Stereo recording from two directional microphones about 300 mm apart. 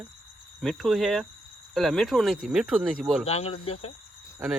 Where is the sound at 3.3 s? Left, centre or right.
Left.